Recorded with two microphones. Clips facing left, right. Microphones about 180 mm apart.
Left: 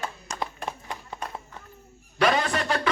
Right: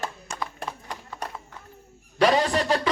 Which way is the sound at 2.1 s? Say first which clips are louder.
Right 3 dB; 30° right (ahead or behind).